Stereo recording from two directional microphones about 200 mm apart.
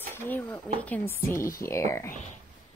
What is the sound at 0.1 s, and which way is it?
A woman's voice, 10° left (ahead or behind).